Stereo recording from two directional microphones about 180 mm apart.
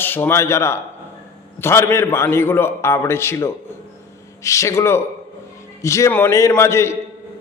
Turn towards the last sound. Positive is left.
turn(degrees=15)  # may be behind; listen again after turning